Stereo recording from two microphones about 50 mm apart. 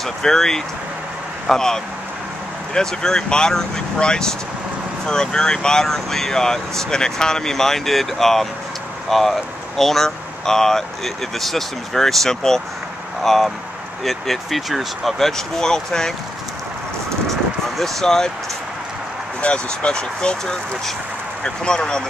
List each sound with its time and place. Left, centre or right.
0.0 s speech: centre
17.3 s a sound: centre
19.4 s speech: centre